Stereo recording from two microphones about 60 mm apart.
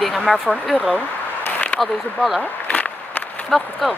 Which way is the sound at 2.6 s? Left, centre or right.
Left.